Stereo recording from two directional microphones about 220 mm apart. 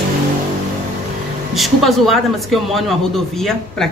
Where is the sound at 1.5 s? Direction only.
Centre (ahead or behind).